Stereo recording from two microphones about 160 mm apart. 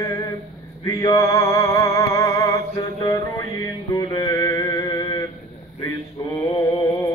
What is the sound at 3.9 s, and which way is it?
Music, 20° left (ahead or behind).